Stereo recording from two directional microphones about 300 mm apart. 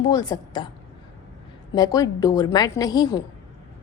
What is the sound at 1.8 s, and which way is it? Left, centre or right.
A woman's voice, centre.